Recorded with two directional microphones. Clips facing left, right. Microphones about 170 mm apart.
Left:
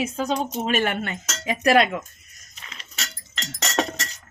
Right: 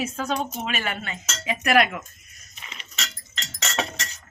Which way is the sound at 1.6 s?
25° left (ahead or behind).